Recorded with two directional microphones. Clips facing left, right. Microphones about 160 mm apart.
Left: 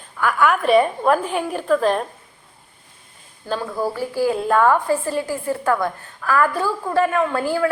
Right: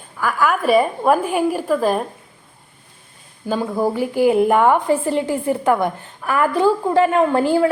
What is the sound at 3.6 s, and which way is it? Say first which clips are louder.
A woman's voice: right 6 dB; 20° right (ahead or behind).